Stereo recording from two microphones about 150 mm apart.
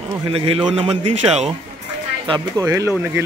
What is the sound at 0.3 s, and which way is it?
A man's voice, 40° right (ahead or behind).